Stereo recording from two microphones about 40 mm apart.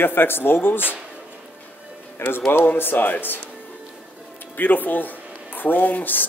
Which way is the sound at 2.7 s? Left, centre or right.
Left.